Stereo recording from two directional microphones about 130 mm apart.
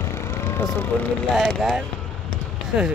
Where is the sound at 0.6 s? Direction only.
15° left (ahead or behind).